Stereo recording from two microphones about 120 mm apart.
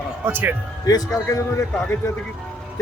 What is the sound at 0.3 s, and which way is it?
Speech, 20° right (ahead or behind).